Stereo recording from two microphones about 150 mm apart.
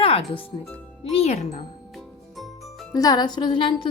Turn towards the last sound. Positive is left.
turn(degrees=30)  # may be behind; listen again after turning